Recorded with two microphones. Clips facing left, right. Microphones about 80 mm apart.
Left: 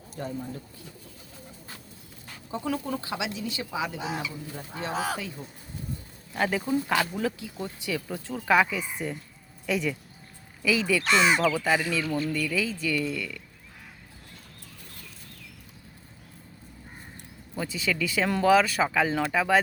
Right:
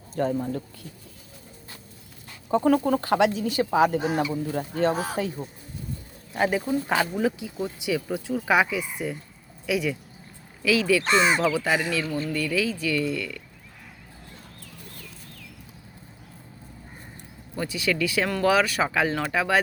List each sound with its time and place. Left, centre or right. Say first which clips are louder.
0.2 s speech: right 9 dB; right
2.6 s speech: right 9 dB; right
5.4 s speech: right 4 dB; right
6.6 s speech: right 1 dB; centre
6.8 s speech: right 3 dB; centre
11.0 s speech: right 1 dB; right
11.3 s speech: right 1 dB; centre
17.5 s speech: right 3 dB; centre